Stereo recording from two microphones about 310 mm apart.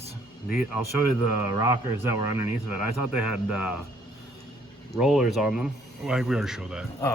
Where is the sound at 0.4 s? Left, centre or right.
Centre.